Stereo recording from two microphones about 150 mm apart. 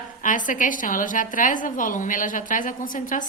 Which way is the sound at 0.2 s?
60° left (ahead or behind).